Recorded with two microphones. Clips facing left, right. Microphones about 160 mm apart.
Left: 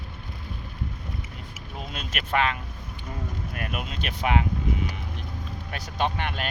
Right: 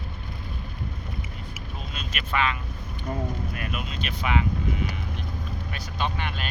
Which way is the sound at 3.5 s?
55° left (ahead or behind).